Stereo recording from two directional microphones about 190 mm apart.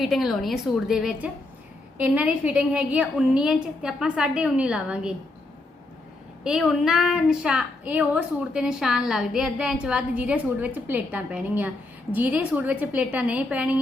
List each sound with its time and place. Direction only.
0.0 s a woman's voice: centre (ahead or behind)
6.4 s a woman's voice: 5° right (ahead or behind)